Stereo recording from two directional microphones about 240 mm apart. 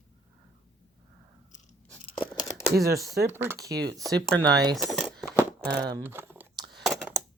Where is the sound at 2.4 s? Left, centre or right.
Centre.